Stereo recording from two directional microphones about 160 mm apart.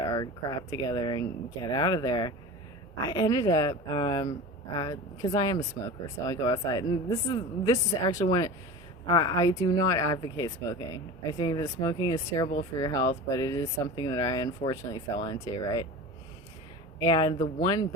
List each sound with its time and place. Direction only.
0.0 s speech: 25° left (ahead or behind)
17.0 s speech: 25° left (ahead or behind)